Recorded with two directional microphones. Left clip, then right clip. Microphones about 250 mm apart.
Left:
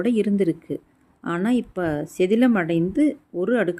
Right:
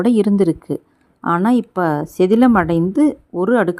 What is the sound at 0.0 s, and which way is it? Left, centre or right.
A woman's voice, right.